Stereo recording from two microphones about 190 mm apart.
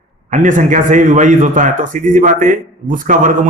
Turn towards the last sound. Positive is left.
turn(degrees=-45)  # may be behind; listen again after turning